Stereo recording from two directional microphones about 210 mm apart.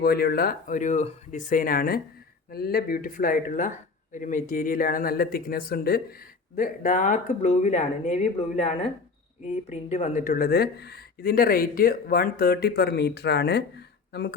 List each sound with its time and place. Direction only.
0.0 s speech: 45° left (ahead or behind)